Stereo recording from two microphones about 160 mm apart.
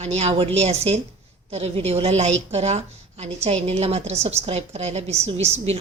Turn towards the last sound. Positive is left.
turn(degrees=-40)  # may be behind; listen again after turning